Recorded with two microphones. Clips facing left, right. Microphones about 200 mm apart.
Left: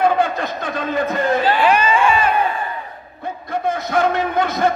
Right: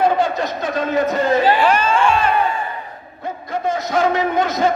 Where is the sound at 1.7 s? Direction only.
10° left (ahead or behind).